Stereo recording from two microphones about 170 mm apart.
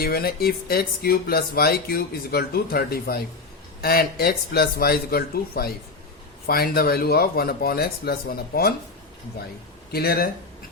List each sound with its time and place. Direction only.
0.0 s speech: 60° left (ahead or behind)
9.9 s speech: 65° left (ahead or behind)